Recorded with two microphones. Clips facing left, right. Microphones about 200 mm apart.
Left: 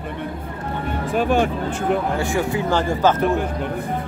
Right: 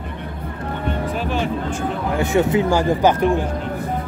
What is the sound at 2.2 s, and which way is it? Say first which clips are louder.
Speech: right 5 dB; 20° right (ahead or behind).